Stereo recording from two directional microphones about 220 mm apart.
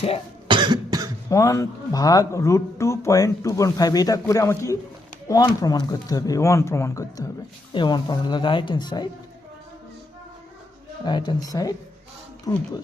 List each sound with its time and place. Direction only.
0.4 s cough: 20° right (ahead or behind)
1.3 s speech: 15° left (ahead or behind)
11.0 s speech: 20° left (ahead or behind)